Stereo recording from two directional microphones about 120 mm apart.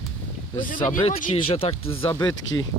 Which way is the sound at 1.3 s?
50° left (ahead or behind).